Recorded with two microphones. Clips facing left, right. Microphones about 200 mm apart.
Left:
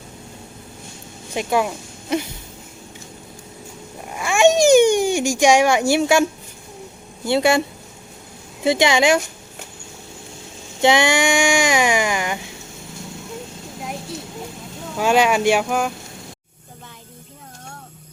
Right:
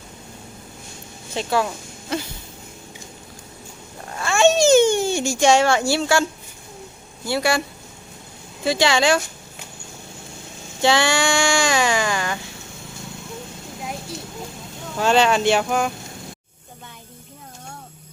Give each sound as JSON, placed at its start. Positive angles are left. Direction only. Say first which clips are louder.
{"t": 1.3, "sound": "speech", "louder": "left 2 dB", "side_deg": 15}
{"t": 4.0, "sound": "a sound", "louder": "left 2 dB", "side_deg": 15}
{"t": 7.3, "sound": "speech", "louder": "left 4 dB", "side_deg": 20}
{"t": 8.6, "sound": "speech", "louder": "left 2 dB", "side_deg": 20}
{"t": 10.8, "sound": "speech", "louder": "left 2 dB", "side_deg": 20}
{"t": 14.9, "sound": "speech", "louder": "left 1 dB", "side_deg": 10}